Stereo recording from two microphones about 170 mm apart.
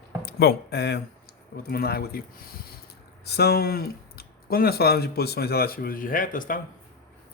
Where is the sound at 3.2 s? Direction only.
70° left (ahead or behind); by 6.6 s 50° left (ahead or behind).